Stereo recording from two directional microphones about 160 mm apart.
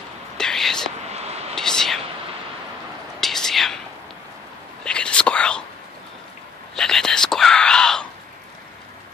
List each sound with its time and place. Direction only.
0.4 s whispering: 5° left (ahead or behind)
1.0 s vehicle: 40° right (ahead or behind)
1.5 s whispering: 5° left (ahead or behind)
3.2 s whispering: centre (ahead or behind)
4.8 s whispering: 5° left (ahead or behind)
6.7 s whispering: 5° left (ahead or behind)